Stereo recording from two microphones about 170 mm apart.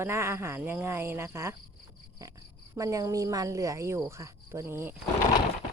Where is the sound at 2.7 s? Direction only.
20° right (ahead or behind).